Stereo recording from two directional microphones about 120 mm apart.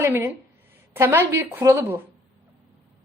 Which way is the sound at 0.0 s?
20° right (ahead or behind).